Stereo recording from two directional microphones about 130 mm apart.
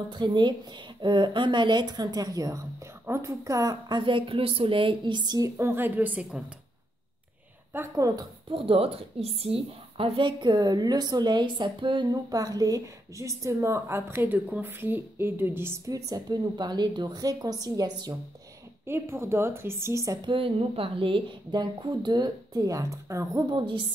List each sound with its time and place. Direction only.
0.1 s a woman's voice: 35° right (ahead or behind)
4.0 s a woman's voice: 40° right (ahead or behind)
5.6 s a woman's voice: 20° right (ahead or behind)
7.9 s a woman's voice: 25° right (ahead or behind)
8.5 s a woman's voice: 45° right (ahead or behind); by 18.1 s 30° right (ahead or behind)
18.9 s a woman's voice: 20° right (ahead or behind)
20.2 s a woman's voice: 45° right (ahead or behind); by 23.4 s 25° right (ahead or behind)
23.5 s a woman's voice: 40° right (ahead or behind)